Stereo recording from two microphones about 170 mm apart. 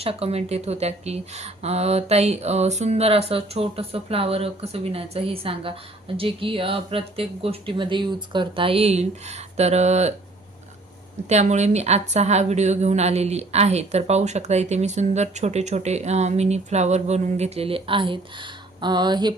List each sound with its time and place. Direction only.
0.0 s a woman's voice: 35° right (ahead or behind)
11.3 s a woman's voice: 40° right (ahead or behind); by 19.3 s 25° right (ahead or behind)